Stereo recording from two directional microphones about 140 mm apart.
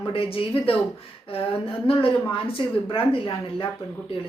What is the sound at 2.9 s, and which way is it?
Speech, 40° left (ahead or behind).